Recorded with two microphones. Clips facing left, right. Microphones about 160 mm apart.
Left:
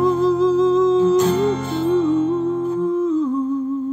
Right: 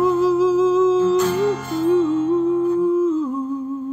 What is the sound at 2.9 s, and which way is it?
Humming, 5° right (ahead or behind).